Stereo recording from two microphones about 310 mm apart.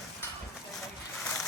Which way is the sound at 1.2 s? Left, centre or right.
Centre.